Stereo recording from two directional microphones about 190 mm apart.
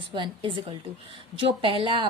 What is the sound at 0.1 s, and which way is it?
A woman's voice, 25° right (ahead or behind).